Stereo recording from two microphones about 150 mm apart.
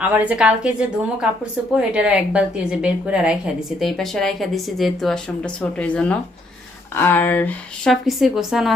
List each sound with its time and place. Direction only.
0.0 s a woman's voice: 10° right (ahead or behind); by 7.5 s 10° left (ahead or behind)
7.9 s a woman's voice: centre (ahead or behind)